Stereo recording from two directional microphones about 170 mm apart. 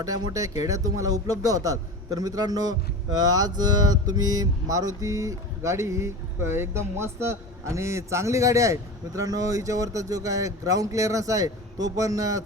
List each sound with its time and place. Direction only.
0.0 s a man's voice: 20° right (ahead or behind)